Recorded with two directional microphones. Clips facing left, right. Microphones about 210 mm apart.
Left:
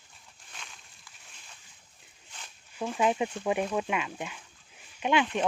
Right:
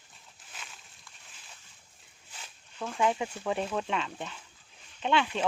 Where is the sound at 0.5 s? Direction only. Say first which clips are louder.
Even; 5° right (ahead or behind).